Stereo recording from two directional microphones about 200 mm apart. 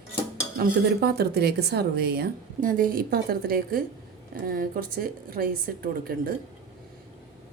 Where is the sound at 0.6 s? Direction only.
55° right (ahead or behind).